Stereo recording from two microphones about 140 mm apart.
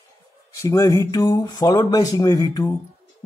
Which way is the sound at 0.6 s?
20° left (ahead or behind).